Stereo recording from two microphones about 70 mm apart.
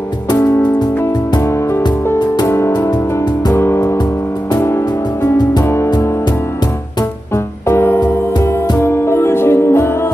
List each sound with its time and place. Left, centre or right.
1.4 s music: left
7.3 s music: left